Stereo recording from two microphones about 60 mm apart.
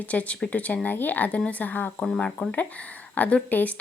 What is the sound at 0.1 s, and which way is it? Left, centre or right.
Speech, left.